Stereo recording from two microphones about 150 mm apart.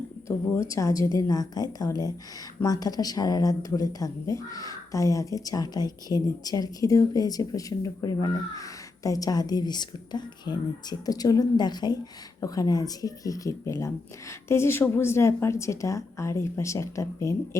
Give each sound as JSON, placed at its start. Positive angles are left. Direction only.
{"t": 0.7, "sound": "speech", "side_deg": 20}